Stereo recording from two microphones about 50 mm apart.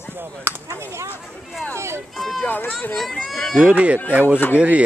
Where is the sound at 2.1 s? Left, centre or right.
Centre.